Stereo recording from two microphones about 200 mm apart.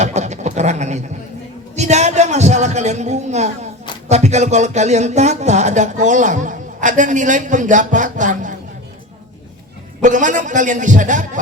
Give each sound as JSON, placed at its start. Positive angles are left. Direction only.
{"t": 0.0, "sound": "a sound", "side_deg": -35}
{"t": 1.7, "sound": "speech", "side_deg": -35}
{"t": 10.0, "sound": "speech", "side_deg": -40}